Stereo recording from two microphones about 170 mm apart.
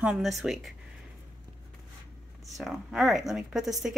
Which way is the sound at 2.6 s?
Centre (ahead or behind).